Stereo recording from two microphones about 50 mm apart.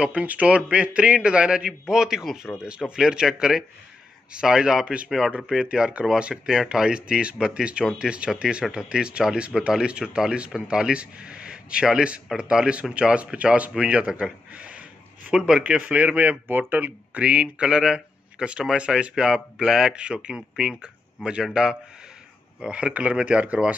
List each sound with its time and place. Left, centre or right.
0.0 s speech: right
6.3 s a man's voice: centre; by 15.3 s right
15.3 s speech: centre
15.9 s speech: right
16.4 s speech: right; by 21.5 s centre
22.6 s speech: right